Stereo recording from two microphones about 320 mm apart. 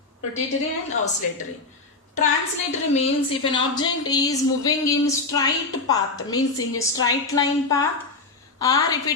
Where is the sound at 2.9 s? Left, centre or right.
Centre.